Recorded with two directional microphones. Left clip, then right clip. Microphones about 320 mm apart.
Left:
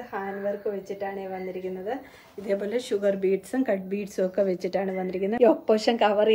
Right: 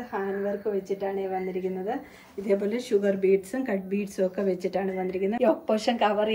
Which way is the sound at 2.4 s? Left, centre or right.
Centre.